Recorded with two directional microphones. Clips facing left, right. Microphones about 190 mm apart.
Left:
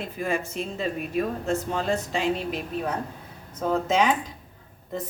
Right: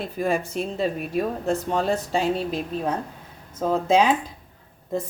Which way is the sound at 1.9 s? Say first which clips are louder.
Even; 35° right (ahead or behind).